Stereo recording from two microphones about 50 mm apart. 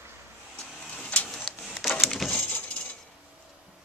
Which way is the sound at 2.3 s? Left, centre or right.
Left.